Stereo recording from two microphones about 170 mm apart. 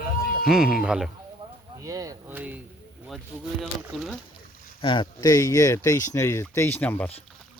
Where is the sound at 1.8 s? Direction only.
20° right (ahead or behind).